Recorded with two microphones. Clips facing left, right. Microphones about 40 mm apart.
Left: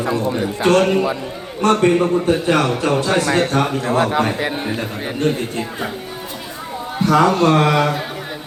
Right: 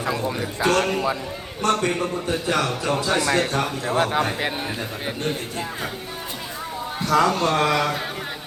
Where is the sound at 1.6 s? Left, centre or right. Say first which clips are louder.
Left 7 dB; left.